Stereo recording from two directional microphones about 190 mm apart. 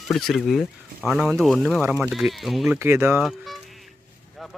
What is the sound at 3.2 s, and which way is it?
Speech, centre (ahead or behind).